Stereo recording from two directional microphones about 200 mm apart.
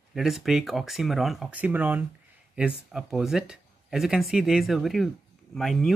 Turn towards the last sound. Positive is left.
turn(degrees=0)  # may be behind; listen again after turning